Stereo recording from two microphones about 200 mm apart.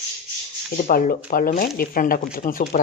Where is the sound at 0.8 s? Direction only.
40° left (ahead or behind).